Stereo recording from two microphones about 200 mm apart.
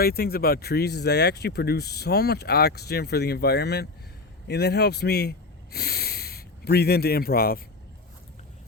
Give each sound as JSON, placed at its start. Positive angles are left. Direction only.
{"t": 0.0, "sound": "a man's voice", "side_deg": 50}